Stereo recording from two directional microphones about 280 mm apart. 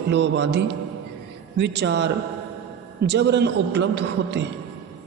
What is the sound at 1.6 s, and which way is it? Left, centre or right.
A man's voice, right.